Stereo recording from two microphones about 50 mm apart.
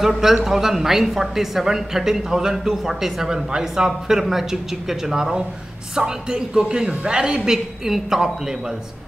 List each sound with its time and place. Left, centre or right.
0.0 s a woman's voice: centre